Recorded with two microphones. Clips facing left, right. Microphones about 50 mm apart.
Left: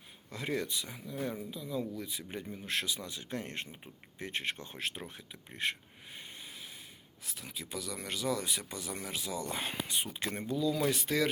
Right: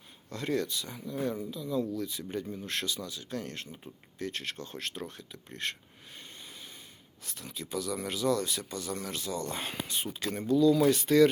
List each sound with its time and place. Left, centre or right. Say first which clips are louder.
0.3 s speech: right 4 dB; centre
2.9 s speech: right 2 dB; left
10.1 s speech: right 3 dB; left
10.4 s speech: right 9 dB; centre